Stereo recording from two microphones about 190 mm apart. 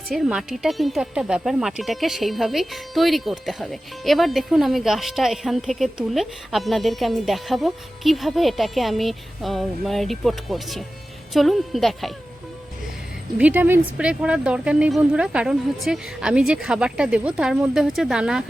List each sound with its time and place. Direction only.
0.1 s speech: centre (ahead or behind)
13.4 s speech: 10° right (ahead or behind)